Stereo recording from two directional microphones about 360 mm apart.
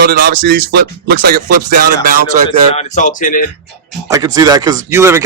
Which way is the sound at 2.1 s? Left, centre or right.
Right.